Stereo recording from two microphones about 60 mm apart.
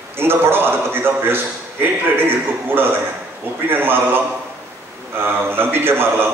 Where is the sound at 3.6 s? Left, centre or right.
Right.